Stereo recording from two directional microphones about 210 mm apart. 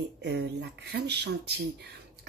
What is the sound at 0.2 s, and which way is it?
Speech, 55° right (ahead or behind).